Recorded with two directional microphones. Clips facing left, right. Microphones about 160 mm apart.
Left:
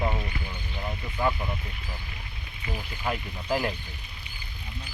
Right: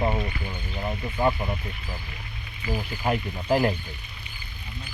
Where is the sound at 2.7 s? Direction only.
30° right (ahead or behind).